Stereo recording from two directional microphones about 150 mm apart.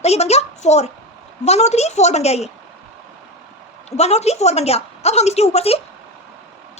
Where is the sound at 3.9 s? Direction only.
45° left (ahead or behind).